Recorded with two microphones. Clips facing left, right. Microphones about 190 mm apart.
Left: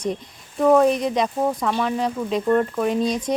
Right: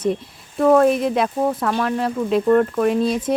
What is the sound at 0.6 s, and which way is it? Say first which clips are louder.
Speech: right 2 dB; centre (ahead or behind).